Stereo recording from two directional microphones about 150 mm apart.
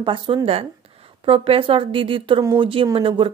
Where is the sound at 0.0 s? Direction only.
35° right (ahead or behind).